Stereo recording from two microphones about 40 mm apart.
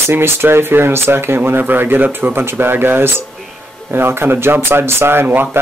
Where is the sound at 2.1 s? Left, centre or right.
Right.